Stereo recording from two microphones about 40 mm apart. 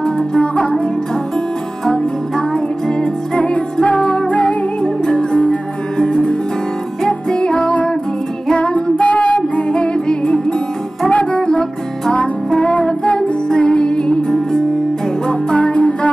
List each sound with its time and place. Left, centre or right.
0.0 s music: left
3.0 s music: left
11.1 s music: left
12.5 s music: left